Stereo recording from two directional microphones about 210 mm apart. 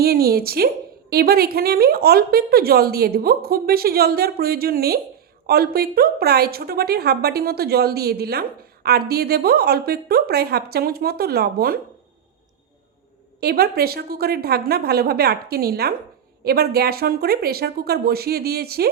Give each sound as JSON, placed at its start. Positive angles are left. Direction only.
{"t": 0.0, "sound": "a woman's voice", "side_deg": -45}
{"t": 13.4, "sound": "a woman's voice", "side_deg": -45}